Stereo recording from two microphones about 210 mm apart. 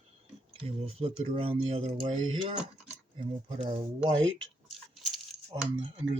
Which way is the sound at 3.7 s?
25° right (ahead or behind).